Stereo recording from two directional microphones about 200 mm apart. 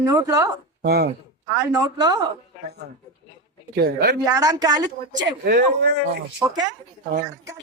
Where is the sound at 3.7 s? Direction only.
55° right (ahead or behind).